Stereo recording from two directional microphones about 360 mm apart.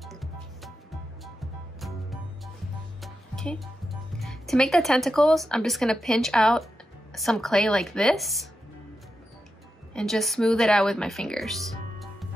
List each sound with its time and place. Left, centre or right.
0.0 s music: centre
1.8 s music: centre
3.0 s speech: centre
9.9 s speech: centre